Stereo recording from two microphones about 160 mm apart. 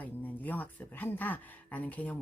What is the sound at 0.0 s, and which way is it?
A woman's voice, 10° left (ahead or behind).